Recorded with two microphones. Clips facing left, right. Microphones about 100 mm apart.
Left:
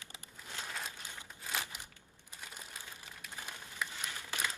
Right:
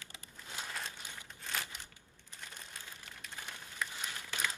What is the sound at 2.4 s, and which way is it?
Crumpling, 10° left (ahead or behind).